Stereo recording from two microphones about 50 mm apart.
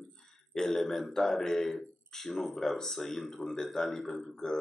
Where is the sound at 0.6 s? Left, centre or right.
Centre.